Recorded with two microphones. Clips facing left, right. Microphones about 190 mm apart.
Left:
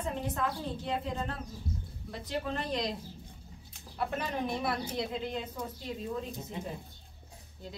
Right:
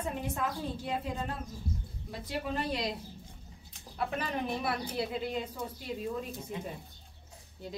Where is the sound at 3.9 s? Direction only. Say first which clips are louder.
Even; 5° right (ahead or behind).